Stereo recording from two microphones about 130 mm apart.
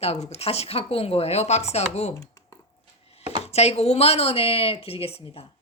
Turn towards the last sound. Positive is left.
turn(degrees=50)  # may be behind; listen again after turning